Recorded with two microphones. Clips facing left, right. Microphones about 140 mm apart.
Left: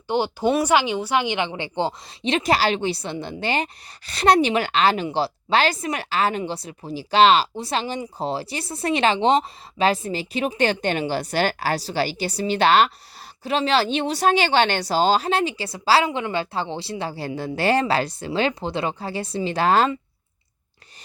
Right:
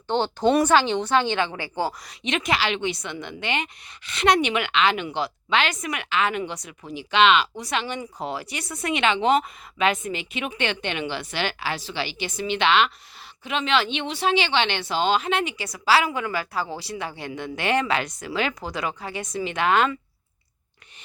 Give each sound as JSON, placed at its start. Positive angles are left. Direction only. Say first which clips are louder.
{"t": 0.1, "sound": "speech", "louder": "even", "side_deg": 10}